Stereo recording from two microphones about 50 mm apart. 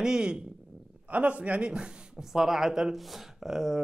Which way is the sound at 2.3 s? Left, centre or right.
Centre.